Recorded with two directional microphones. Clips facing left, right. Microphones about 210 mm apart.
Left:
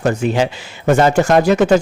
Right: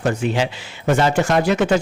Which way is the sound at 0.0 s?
40° left (ahead or behind).